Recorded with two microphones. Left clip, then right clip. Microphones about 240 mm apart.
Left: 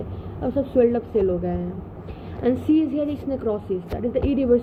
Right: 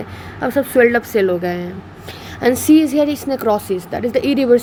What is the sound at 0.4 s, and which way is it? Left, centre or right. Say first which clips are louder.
A woman's voice: right 6 dB; right.